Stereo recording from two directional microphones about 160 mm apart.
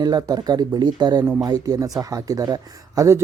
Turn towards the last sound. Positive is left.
turn(degrees=-20)  # may be behind; listen again after turning